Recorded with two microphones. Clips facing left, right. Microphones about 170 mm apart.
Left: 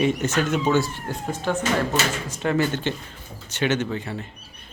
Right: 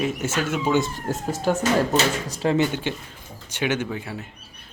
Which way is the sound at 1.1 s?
40° right (ahead or behind).